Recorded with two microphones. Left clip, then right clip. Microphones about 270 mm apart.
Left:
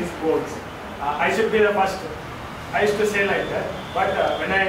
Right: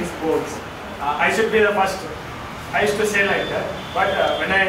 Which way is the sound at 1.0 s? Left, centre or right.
Centre.